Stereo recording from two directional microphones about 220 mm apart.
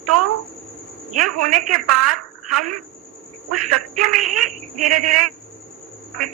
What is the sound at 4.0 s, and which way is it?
Speech, 90° right.